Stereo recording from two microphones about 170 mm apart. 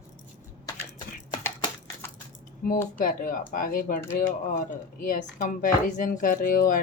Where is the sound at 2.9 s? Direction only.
55° left (ahead or behind).